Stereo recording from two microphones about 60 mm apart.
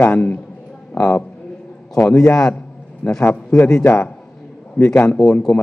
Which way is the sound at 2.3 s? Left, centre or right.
Centre.